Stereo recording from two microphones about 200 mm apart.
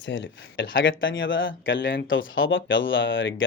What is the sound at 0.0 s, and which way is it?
Speech, 70° left (ahead or behind).